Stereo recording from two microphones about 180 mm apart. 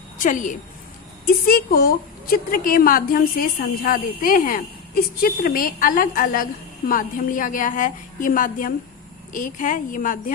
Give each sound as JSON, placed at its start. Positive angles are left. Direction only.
{"t": 0.2, "sound": "a woman's voice", "side_deg": 45}